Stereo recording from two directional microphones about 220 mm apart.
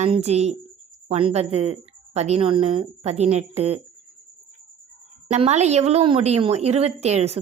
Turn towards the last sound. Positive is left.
turn(degrees=-30)  # may be behind; listen again after turning